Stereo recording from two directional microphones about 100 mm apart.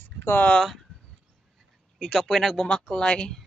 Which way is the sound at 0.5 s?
5° left (ahead or behind).